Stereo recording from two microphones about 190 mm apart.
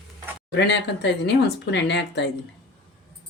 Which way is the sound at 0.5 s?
65° left (ahead or behind).